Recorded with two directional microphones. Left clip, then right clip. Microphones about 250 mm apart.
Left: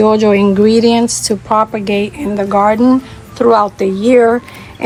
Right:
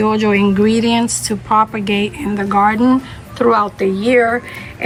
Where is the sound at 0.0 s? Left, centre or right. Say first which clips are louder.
Left 5 dB; centre.